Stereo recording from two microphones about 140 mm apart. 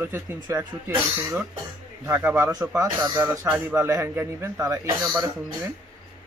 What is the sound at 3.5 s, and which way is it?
Speech, 15° right (ahead or behind).